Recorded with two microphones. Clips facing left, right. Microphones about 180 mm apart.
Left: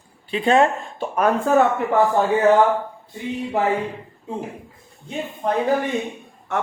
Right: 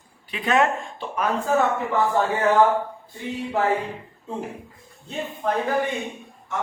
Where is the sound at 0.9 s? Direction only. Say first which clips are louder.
Left 5 dB; 50° left (ahead or behind).